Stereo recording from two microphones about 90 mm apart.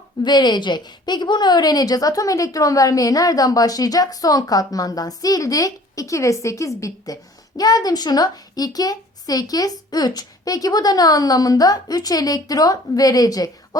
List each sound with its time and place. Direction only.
0.2 s a woman's voice: 50° left (ahead or behind)